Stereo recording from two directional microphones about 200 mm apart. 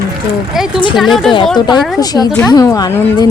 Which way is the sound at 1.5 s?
20° left (ahead or behind).